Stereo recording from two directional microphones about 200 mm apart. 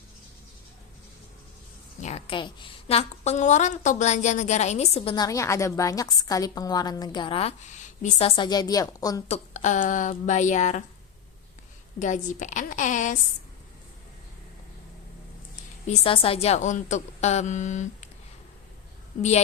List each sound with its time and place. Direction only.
2.0 s a woman's voice: 35° left (ahead or behind)
8.4 s a woman's voice: 20° left (ahead or behind)
9.3 s a woman's voice: 35° left (ahead or behind)
11.9 s a woman's voice: 40° left (ahead or behind)
15.9 s a woman's voice: 25° left (ahead or behind)